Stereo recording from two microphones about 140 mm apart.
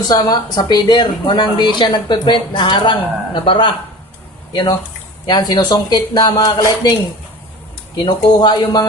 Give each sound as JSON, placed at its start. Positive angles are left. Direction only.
{"t": 0.0, "sound": "speech", "side_deg": 30}
{"t": 8.0, "sound": "speech", "side_deg": 35}